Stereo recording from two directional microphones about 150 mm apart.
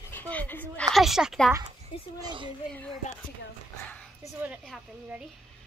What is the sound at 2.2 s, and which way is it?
Speech, 30° right (ahead or behind).